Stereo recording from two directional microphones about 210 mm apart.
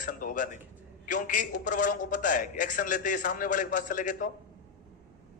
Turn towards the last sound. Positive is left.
turn(degrees=40)  # may be behind; listen again after turning